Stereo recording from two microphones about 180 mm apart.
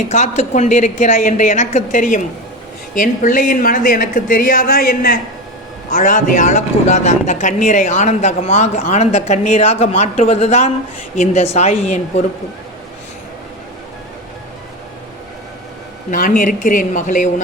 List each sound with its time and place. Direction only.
0.0 s speech: 40° left (ahead or behind)
16.0 s speech: 50° left (ahead or behind)